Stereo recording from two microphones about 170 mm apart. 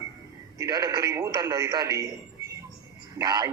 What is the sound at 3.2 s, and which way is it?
Speech, 25° right (ahead or behind).